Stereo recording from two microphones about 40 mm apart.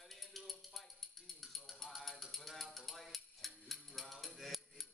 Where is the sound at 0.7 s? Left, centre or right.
Centre.